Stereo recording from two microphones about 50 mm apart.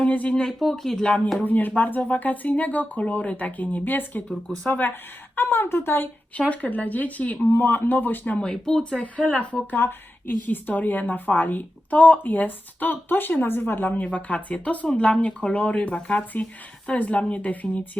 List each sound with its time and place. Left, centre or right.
0.0 s speech: left
0.6 s speech: centre
1.0 s a woman's voice: left
5.4 s speech: left
6.5 s a woman's voice: left
7.5 s a woman's voice: left
8.4 s speech: centre
9.7 s a woman's voice: left